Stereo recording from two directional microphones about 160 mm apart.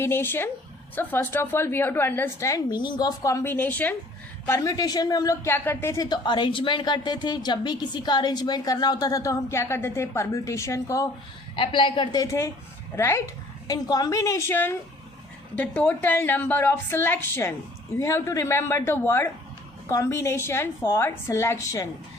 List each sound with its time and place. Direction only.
0.0 s a woman's voice: 15° left (ahead or behind)
11.5 s a woman's voice: 30° left (ahead or behind)